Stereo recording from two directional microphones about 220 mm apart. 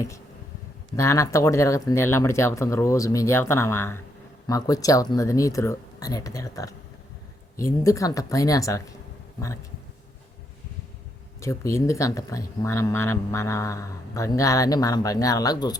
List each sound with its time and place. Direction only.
0.9 s speech: 15° left (ahead or behind)
11.3 s speech: 15° left (ahead or behind)